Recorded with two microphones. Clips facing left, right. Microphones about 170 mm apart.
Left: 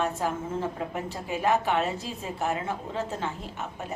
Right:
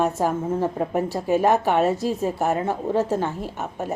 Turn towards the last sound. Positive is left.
turn(degrees=-45)  # may be behind; listen again after turning